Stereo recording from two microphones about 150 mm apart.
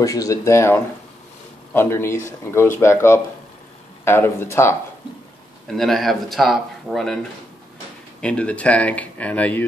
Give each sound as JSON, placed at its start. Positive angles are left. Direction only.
{"t": 0.0, "sound": "speech", "side_deg": 25}
{"t": 5.7, "sound": "speech", "side_deg": 0}
{"t": 8.2, "sound": "speech", "side_deg": 10}